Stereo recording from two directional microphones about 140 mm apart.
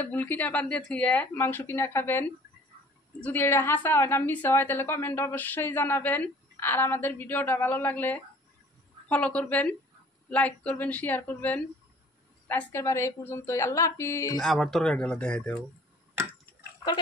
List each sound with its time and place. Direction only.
0.0 s a woman's voice: 10° left (ahead or behind)
14.4 s speech: centre (ahead or behind)